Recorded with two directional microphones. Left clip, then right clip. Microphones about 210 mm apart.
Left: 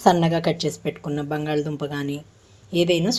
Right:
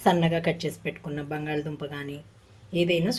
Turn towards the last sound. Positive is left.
turn(degrees=30)  # may be behind; listen again after turning